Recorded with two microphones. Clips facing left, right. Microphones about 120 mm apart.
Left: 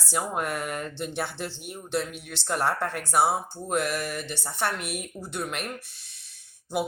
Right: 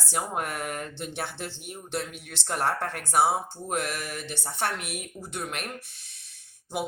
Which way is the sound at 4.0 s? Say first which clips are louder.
Left 3 dB; 65° left (ahead or behind).